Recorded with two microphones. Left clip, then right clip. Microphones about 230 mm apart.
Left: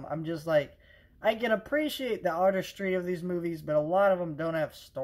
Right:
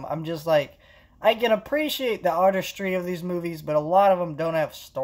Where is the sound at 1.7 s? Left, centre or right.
Right.